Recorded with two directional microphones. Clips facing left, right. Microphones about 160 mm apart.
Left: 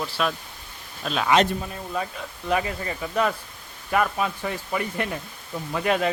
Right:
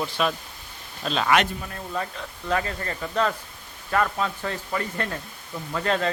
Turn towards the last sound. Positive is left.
turn(degrees=10)  # may be behind; listen again after turning